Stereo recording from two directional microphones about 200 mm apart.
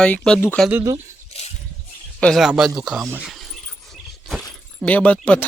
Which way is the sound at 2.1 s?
Centre (ahead or behind).